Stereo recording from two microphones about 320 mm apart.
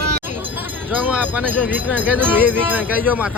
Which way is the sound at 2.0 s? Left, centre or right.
Centre.